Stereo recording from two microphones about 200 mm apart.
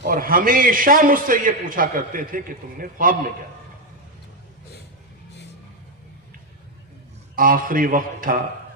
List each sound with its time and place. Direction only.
0.0 s a man's voice: 45° right (ahead or behind)
7.3 s a man's voice: 45° right (ahead or behind)